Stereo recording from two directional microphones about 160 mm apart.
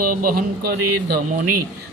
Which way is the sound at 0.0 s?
60° right (ahead or behind).